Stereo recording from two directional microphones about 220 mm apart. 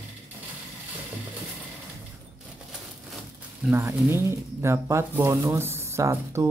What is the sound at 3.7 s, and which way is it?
Speech, 10° right (ahead or behind).